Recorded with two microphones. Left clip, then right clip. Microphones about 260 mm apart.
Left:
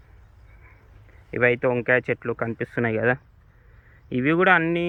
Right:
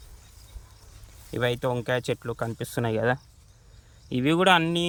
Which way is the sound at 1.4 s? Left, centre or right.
Right.